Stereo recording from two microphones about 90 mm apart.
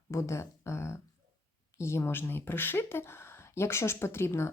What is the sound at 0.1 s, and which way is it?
Speech, 35° left (ahead or behind).